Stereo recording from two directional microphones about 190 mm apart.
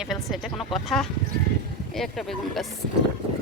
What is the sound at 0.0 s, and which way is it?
Speech, centre (ahead or behind).